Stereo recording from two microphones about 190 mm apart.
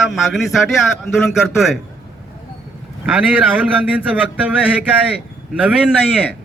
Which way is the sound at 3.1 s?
10° right (ahead or behind).